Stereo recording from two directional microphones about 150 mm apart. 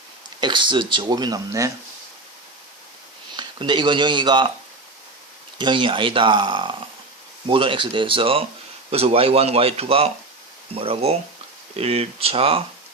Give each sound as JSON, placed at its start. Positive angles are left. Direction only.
{"t": 0.3, "sound": "speech", "side_deg": -30}
{"t": 3.3, "sound": "speech", "side_deg": -30}
{"t": 5.5, "sound": "speech", "side_deg": -30}